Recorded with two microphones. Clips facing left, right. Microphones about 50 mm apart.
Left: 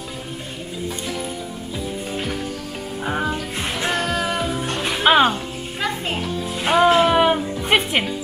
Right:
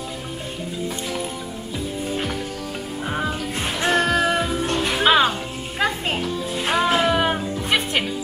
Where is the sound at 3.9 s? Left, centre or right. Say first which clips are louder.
Right 6 dB; right.